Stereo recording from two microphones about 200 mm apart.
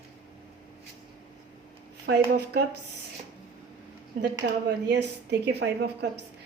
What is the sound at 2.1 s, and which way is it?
Speech, 55° right (ahead or behind).